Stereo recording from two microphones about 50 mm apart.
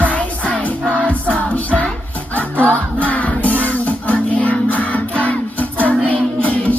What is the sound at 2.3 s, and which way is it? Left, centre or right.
Music, left.